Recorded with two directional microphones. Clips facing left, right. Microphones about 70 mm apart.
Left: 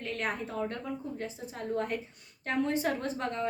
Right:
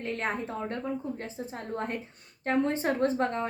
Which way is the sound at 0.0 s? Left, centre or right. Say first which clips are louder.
Right 2 dB; right.